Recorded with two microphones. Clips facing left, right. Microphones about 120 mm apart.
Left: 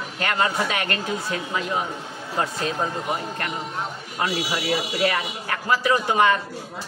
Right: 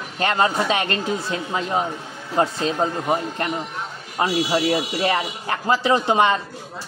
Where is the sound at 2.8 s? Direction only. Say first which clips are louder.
Right 7 dB; 25° right (ahead or behind).